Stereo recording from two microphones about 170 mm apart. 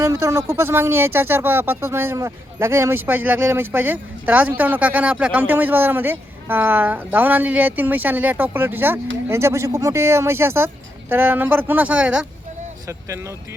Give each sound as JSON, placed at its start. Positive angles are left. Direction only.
{"t": 0.0, "sound": "speech", "side_deg": -15}
{"t": 12.9, "sound": "speech", "side_deg": -15}